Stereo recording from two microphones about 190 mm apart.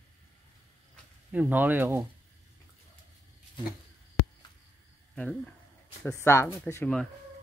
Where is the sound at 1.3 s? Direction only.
10° right (ahead or behind).